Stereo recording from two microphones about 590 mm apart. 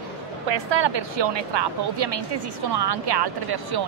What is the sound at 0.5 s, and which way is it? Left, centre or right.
A woman's voice, right.